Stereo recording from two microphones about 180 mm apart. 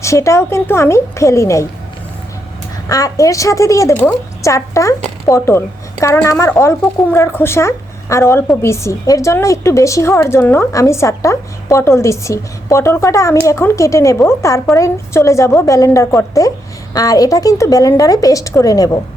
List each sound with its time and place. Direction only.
0.0 s a woman's voice: 15° left (ahead or behind)
2.9 s a woman's voice: 20° left (ahead or behind)